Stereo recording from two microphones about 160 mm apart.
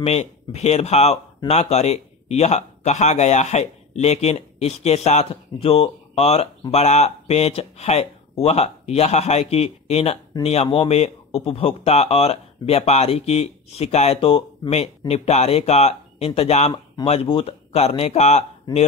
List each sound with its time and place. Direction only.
0.0 s a man's voice: 40° left (ahead or behind)